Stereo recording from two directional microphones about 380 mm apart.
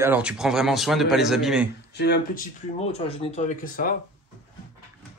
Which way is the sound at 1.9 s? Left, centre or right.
Left.